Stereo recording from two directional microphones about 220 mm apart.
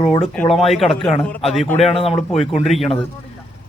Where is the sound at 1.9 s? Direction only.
25° left (ahead or behind).